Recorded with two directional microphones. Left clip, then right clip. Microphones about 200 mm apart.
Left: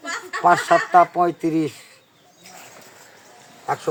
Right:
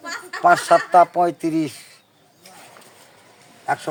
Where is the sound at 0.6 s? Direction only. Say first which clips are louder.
Right 1 dB; 50° right (ahead or behind).